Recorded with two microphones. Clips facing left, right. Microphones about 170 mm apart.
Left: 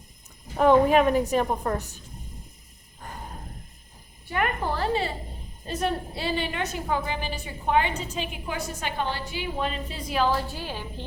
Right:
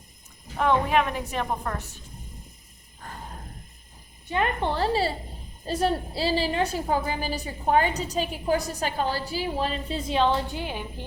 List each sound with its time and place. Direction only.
0.6 s a woman's voice: 40° left (ahead or behind)
4.3 s a woman's voice: 25° right (ahead or behind)